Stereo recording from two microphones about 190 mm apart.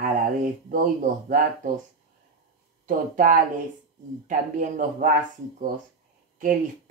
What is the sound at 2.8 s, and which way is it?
Speech, 45° right (ahead or behind).